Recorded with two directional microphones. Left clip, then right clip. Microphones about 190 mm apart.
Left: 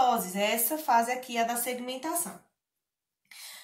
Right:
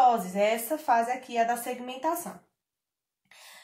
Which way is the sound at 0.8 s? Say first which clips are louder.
Even; 25° right (ahead or behind).